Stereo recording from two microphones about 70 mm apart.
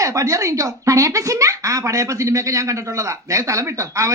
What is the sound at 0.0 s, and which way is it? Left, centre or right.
Speech, right.